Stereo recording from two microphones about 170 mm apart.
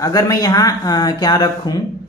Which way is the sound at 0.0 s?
20° left (ahead or behind).